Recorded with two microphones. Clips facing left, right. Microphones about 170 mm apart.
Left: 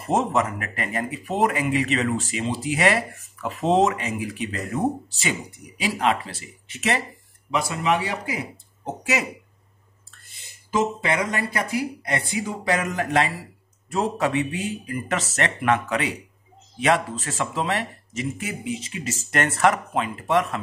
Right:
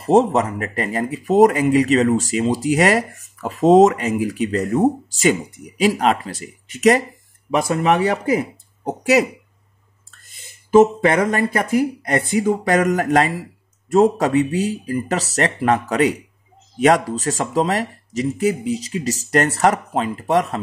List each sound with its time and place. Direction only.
0.0 s speech: 35° right (ahead or behind)
5.8 s speech: 40° right (ahead or behind)
10.2 s speech: 50° right (ahead or behind)